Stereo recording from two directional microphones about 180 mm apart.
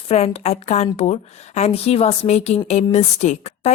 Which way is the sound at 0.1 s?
35° left (ahead or behind).